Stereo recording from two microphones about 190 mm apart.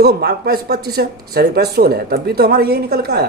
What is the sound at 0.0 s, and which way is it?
Speech, 55° right (ahead or behind).